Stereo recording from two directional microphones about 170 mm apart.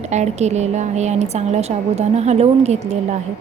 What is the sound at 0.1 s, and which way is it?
A woman's voice, 40° right (ahead or behind).